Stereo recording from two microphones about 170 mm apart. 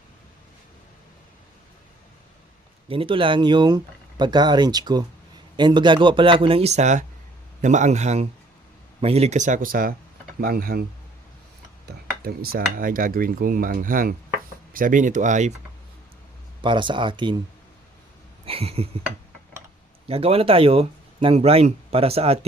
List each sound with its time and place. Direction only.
2.9 s speech: 30° right (ahead or behind); by 9.9 s 55° right (ahead or behind)
10.4 s cutlery: 60° right (ahead or behind)
11.9 s cutlery: 65° right (ahead or behind)
14.7 s speech: 55° right (ahead or behind)
16.6 s speech: 30° right (ahead or behind)
18.4 s speech: 35° right (ahead or behind)
20.1 s speech: 35° right (ahead or behind)